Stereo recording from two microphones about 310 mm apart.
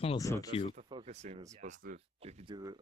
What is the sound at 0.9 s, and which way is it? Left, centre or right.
Speech, centre.